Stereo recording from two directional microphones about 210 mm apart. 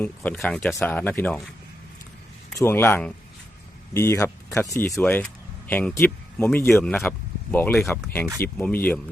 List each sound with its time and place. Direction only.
0.0 s speech: 10° left (ahead or behind)
2.6 s speech: 10° left (ahead or behind)